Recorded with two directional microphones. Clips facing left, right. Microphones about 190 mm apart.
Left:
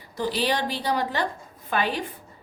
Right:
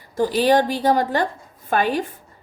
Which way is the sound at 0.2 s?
45° right (ahead or behind).